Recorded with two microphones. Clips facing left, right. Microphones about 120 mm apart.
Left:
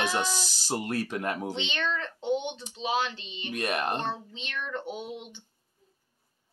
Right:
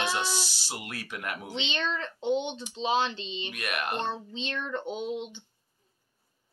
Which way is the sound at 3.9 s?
25° right (ahead or behind).